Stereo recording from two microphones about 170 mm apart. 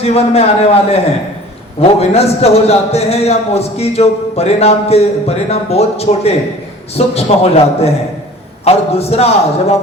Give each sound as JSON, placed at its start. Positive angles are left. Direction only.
{"t": 0.0, "sound": "a man's voice", "side_deg": 40}